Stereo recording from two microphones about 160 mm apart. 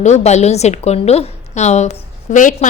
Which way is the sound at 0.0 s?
45° left (ahead or behind).